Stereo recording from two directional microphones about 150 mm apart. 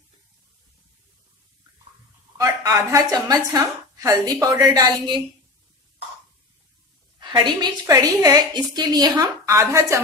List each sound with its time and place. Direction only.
2.3 s a woman's voice: 25° right (ahead or behind)
7.2 s a woman's voice: 30° right (ahead or behind)